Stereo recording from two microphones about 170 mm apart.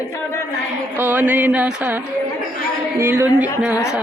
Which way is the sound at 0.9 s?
10° right (ahead or behind).